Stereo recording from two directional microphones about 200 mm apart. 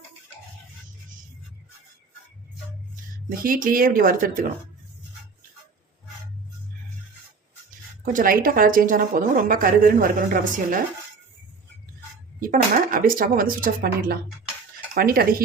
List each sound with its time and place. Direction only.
2.9 s speech: 45° right (ahead or behind)
8.0 s a woman's voice: 45° right (ahead or behind)
12.4 s a woman's voice: 45° right (ahead or behind)